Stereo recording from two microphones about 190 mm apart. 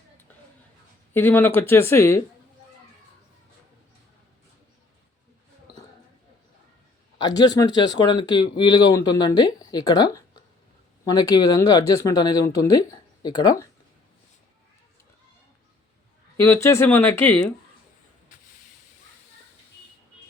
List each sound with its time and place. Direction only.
1.1 s speech: 10° left (ahead or behind)
7.3 s speech: 20° left (ahead or behind)
11.1 s speech: 20° left (ahead or behind)
16.4 s speech: 10° left (ahead or behind)